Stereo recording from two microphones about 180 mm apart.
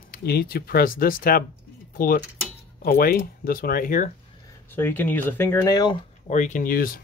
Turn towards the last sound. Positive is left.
turn(degrees=55)  # may be behind; listen again after turning